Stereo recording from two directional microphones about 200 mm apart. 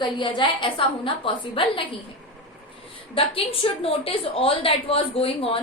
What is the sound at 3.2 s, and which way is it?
A woman's voice, 25° left (ahead or behind).